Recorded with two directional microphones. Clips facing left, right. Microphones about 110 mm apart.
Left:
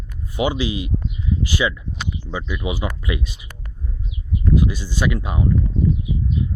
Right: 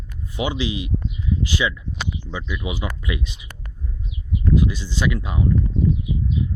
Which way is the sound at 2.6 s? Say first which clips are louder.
Left 4 dB; 60° left (ahead or behind).